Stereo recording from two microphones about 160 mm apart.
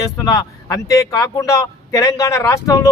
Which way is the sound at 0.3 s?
25° left (ahead or behind).